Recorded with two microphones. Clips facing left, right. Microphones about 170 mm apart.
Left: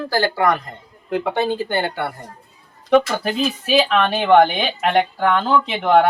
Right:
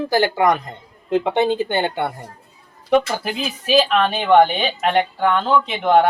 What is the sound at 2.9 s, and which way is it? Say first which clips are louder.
Speech: left 2 dB; 5° right (ahead or behind).